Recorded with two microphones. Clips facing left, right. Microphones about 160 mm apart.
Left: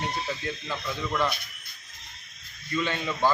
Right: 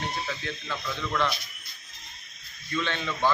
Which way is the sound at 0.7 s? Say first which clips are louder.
Even; 15° left (ahead or behind).